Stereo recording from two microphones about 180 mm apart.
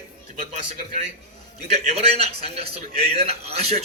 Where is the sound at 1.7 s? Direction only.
35° right (ahead or behind).